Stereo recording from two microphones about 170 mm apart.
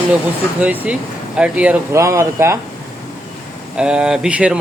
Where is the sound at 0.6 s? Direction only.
10° right (ahead or behind).